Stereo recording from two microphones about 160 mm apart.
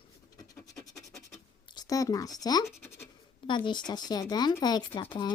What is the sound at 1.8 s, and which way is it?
Speech, 20° left (ahead or behind).